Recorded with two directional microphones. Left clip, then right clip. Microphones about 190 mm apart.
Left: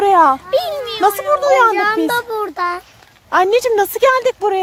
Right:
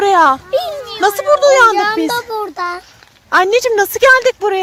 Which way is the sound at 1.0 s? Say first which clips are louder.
Right 4 dB; centre (ahead or behind).